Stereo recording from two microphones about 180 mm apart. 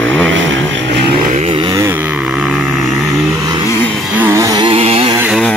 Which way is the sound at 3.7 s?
10° left (ahead or behind).